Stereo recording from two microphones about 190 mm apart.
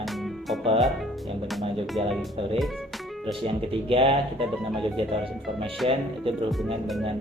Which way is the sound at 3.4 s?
30° right (ahead or behind).